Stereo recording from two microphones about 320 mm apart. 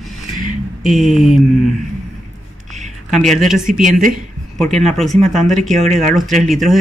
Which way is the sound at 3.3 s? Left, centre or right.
Centre.